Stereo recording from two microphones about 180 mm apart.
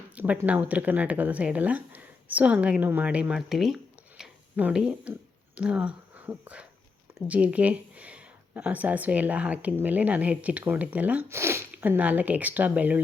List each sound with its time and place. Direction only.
0.2 s speech: 10° right (ahead or behind)
4.2 s a sound: 5° right (ahead or behind)
5.5 s speech: 5° right (ahead or behind)